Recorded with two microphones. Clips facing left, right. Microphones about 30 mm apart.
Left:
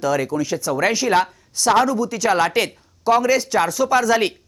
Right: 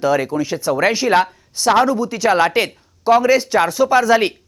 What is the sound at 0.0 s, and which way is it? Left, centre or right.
Speech, right.